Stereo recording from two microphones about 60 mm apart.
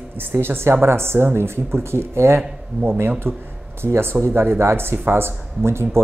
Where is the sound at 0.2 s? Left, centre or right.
Right.